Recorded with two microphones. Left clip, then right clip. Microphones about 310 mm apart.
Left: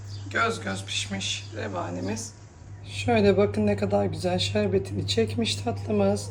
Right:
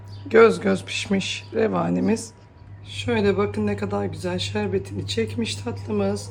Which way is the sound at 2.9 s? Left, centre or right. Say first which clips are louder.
Even; centre.